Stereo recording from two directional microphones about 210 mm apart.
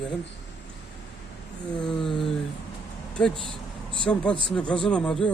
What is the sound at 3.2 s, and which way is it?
Speech, 5° left (ahead or behind).